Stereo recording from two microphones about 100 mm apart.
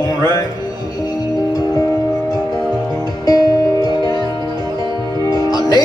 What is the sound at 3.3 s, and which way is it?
Music, 40° left (ahead or behind).